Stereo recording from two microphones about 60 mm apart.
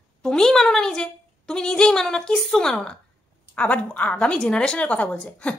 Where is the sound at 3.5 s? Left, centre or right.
Left.